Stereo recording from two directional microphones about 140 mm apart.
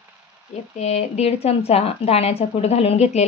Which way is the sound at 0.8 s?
50° left (ahead or behind).